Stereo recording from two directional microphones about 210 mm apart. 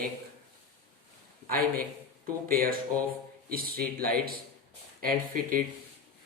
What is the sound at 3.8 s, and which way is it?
Speech, 45° right (ahead or behind).